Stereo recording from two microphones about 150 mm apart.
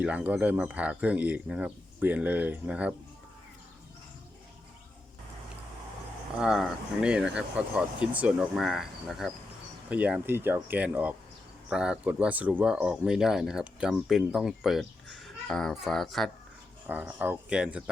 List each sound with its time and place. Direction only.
0.0 s speech: 10° right (ahead or behind)
6.4 s speech: 5° right (ahead or behind)
16.8 s speech: 10° right (ahead or behind)